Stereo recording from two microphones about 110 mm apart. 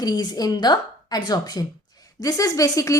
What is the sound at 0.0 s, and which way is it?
A woman's voice, 35° left (ahead or behind).